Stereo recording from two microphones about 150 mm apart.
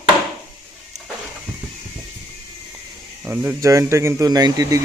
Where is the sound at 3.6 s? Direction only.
20° right (ahead or behind).